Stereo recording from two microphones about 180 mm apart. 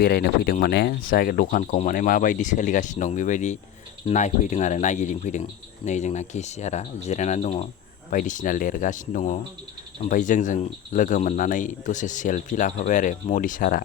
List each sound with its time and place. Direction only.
0.0 s speech: 60° left (ahead or behind)